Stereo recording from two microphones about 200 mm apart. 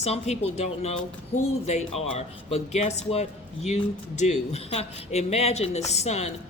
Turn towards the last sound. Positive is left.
turn(degrees=35)  # may be behind; listen again after turning